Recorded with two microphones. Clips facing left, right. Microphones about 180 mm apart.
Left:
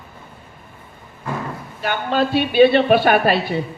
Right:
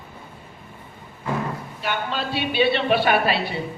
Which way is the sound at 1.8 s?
45° left (ahead or behind).